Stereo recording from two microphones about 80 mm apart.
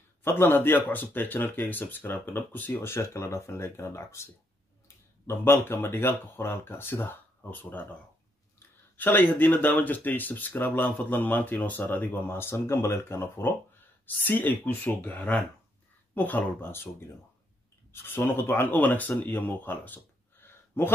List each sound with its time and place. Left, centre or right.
0.2 s speech: left
5.2 s speech: left
8.9 s speech: left
18.0 s speech: left